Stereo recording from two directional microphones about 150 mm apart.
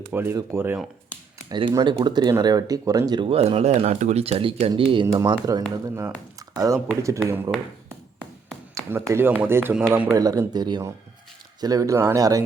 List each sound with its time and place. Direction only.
0.1 s speech: 15° right (ahead or behind)
1.5 s speech: 30° right (ahead or behind)
8.7 s speech: 20° right (ahead or behind)